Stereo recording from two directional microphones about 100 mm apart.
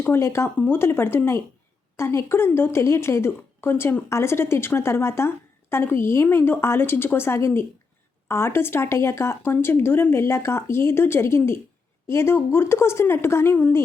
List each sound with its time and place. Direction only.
0.0 s a woman's voice: 25° left (ahead or behind)